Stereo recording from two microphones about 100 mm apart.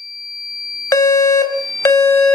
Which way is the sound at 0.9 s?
35° left (ahead or behind).